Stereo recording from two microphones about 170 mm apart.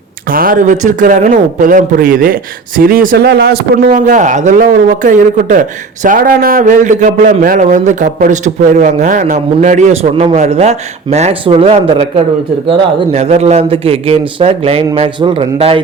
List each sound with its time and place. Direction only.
0.3 s a man's voice: 55° right (ahead or behind)
3.8 s a man's voice: 50° right (ahead or behind); by 15.8 s 35° right (ahead or behind)